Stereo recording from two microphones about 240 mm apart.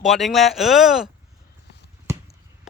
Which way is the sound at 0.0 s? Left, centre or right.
Centre.